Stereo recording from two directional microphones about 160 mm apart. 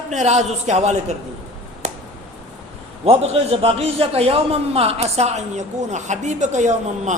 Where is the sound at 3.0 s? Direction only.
40° right (ahead or behind).